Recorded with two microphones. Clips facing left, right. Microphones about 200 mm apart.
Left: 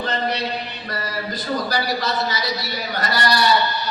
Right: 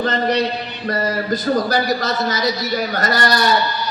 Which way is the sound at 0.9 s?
45° right (ahead or behind).